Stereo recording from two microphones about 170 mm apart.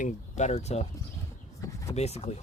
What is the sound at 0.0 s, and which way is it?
Speech, 45° left (ahead or behind).